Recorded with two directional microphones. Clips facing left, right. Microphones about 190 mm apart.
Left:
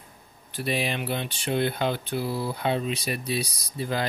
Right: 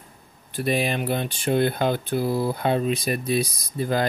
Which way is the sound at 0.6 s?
45° right (ahead or behind).